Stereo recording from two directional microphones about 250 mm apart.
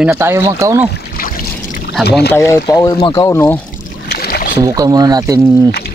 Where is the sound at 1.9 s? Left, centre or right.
Centre.